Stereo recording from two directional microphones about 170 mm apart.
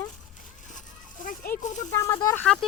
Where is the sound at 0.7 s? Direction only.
50° left (ahead or behind).